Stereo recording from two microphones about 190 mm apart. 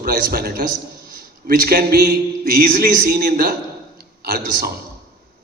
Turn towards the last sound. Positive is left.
turn(degrees=-50)  # may be behind; listen again after turning